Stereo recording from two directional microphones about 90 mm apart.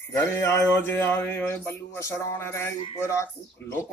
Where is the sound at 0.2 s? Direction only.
25° left (ahead or behind).